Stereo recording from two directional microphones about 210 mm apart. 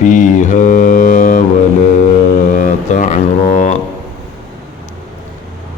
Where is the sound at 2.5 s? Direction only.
35° left (ahead or behind).